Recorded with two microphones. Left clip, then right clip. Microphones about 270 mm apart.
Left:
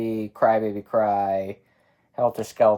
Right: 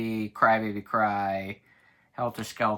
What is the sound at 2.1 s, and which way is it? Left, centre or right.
Speech, right.